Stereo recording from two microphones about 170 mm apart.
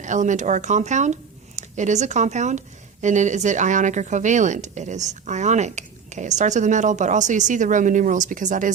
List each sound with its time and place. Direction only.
0.0 s speech: 45° right (ahead or behind)